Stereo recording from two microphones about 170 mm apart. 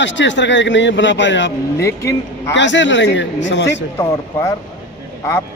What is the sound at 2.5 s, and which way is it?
A man's voice, 90° left.